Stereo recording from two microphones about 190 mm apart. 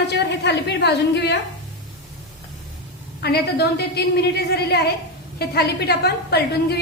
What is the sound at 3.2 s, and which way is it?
A woman's voice, 55° left (ahead or behind).